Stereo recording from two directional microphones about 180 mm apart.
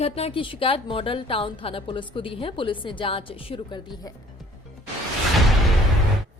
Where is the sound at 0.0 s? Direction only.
30° left (ahead or behind).